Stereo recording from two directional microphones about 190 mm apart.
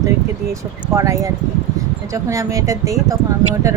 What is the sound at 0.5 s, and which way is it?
Speech, 15° right (ahead or behind).